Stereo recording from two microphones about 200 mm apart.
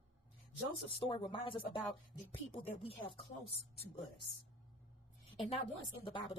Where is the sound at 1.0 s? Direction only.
25° left (ahead or behind).